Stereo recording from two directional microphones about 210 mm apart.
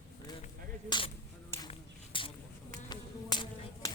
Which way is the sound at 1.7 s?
25° left (ahead or behind).